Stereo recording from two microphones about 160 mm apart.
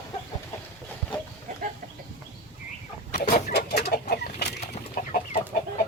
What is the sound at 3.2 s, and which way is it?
Chicken, 65° left (ahead or behind).